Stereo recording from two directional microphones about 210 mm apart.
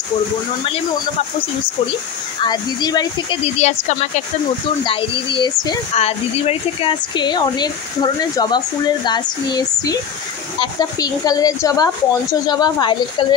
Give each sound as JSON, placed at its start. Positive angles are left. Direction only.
{"t": 2.4, "sound": "speech", "side_deg": 20}
{"t": 3.6, "sound": "speech", "side_deg": 35}
{"t": 4.8, "sound": "speech", "side_deg": 25}